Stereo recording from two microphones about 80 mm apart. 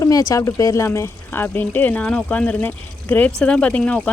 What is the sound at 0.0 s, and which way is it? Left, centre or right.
Speech, left.